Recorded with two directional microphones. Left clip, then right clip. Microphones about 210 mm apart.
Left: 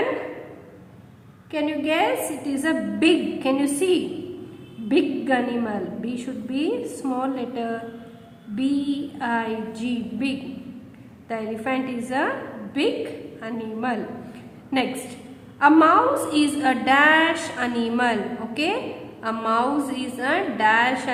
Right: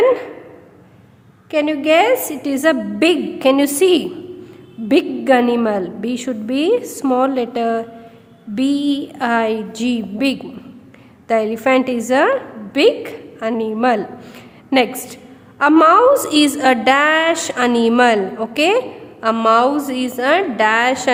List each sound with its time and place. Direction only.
1.5 s a woman's voice: 50° right (ahead or behind)